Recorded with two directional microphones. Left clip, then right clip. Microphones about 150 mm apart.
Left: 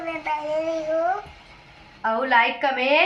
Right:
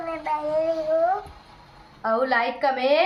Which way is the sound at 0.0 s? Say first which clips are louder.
Even; 5° right (ahead or behind).